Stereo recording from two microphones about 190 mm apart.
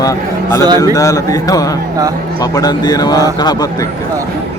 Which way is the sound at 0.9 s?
20° left (ahead or behind).